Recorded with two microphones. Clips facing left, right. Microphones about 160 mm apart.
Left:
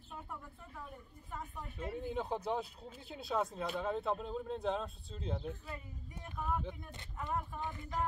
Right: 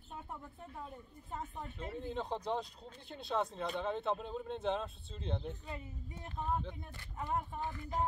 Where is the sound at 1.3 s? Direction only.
25° right (ahead or behind).